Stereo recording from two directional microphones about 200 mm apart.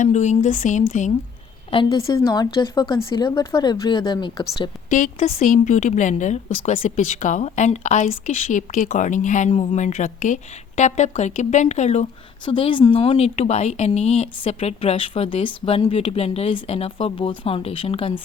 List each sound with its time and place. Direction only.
0.0 s a woman's voice: 35° left (ahead or behind)
1.7 s speech: 20° left (ahead or behind)
4.9 s a woman's voice: 40° left (ahead or behind)